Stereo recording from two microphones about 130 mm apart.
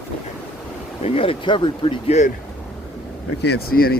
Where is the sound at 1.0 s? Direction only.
50° left (ahead or behind).